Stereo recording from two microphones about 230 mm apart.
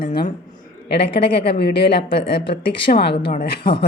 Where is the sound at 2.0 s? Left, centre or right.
Left.